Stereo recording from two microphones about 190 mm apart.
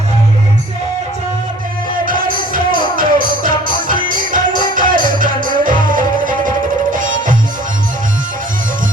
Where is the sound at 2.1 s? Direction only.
45° right (ahead or behind).